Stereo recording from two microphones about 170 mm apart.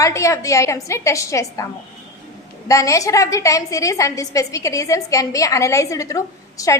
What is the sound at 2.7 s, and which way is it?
A woman's voice, 20° left (ahead or behind).